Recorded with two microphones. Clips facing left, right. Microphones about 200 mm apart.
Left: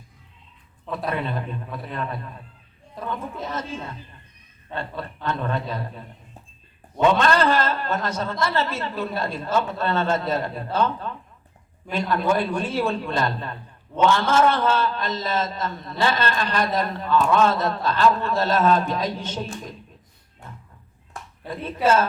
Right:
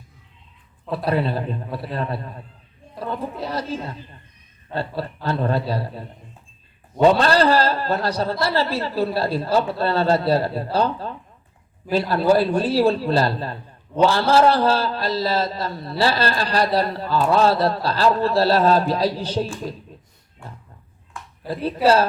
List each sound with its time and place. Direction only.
0.9 s a man's voice: 35° right (ahead or behind)
21.4 s a man's voice: 35° right (ahead or behind)